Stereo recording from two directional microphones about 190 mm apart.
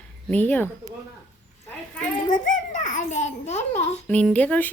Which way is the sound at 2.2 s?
40° left (ahead or behind).